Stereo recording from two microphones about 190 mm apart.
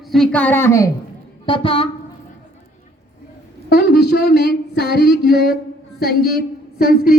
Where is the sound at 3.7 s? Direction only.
55° left (ahead or behind).